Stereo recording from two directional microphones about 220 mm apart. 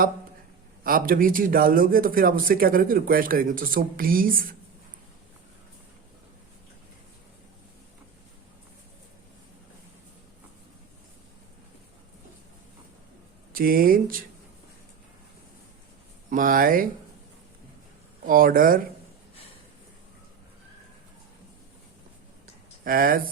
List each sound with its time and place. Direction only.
0.9 s a man's voice: 40° right (ahead or behind)
13.5 s a man's voice: 40° right (ahead or behind)
16.3 s a man's voice: 40° right (ahead or behind)
18.3 s a man's voice: 40° right (ahead or behind)
22.8 s speech: 40° right (ahead or behind)